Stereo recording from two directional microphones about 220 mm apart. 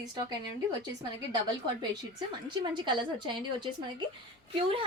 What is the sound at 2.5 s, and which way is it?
Speech, 20° right (ahead or behind).